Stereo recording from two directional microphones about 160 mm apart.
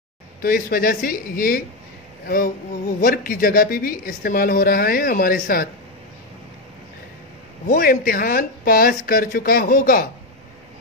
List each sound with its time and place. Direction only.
0.4 s a woman's voice: 65° left (ahead or behind)
7.6 s speech: 70° left (ahead or behind)